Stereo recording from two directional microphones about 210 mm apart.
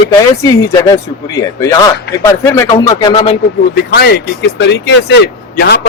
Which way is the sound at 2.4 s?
10° left (ahead or behind).